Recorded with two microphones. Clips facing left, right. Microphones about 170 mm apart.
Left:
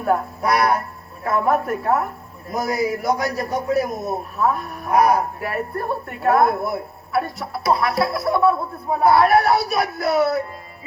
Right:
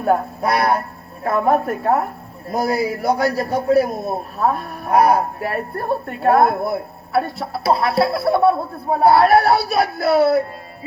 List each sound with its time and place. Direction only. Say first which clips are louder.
0.0 s a man's voice: right 2 dB; 30° right (ahead or behind)